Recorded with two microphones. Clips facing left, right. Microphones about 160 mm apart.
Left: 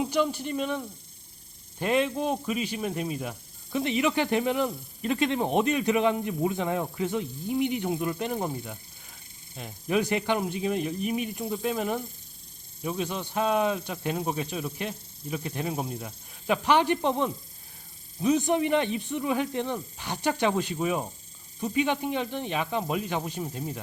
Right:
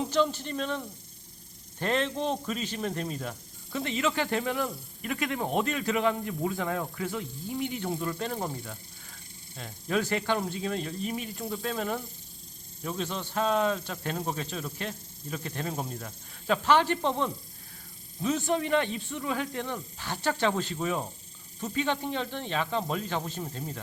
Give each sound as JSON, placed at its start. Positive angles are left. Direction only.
{"t": 0.0, "sound": "a man's voice", "side_deg": 10}